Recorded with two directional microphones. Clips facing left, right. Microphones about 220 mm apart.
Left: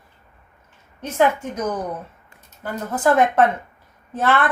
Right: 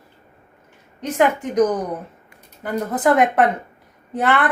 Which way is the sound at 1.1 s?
15° right (ahead or behind).